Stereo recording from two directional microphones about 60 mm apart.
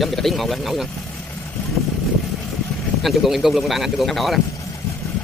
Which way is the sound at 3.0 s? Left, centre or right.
Centre.